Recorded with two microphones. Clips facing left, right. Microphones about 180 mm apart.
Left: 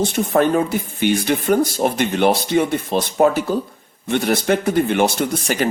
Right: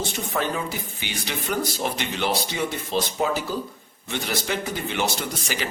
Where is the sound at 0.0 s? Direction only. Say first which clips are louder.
Left 10 dB; 55° left (ahead or behind).